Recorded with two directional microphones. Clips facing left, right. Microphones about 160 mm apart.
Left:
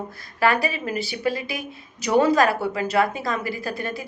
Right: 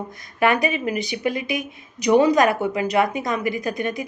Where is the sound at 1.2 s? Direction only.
35° left (ahead or behind).